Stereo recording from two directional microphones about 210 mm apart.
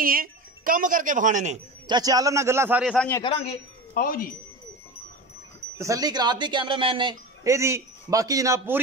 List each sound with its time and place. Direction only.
0.0 s speech: 45° right (ahead or behind)
1.9 s speech: 20° right (ahead or behind); by 3.1 s centre (ahead or behind)
3.1 s speech: 15° left (ahead or behind)
3.9 s speech: 45° left (ahead or behind)
5.8 s speech: 15° right (ahead or behind)